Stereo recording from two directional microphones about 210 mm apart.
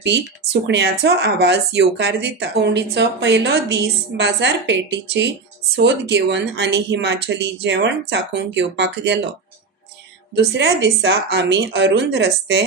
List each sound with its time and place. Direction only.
0.0 s speech: 55° right (ahead or behind)
10.5 s speech: 55° right (ahead or behind)